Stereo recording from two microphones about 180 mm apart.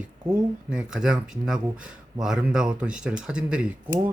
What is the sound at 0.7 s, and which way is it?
Speech, 5° right (ahead or behind).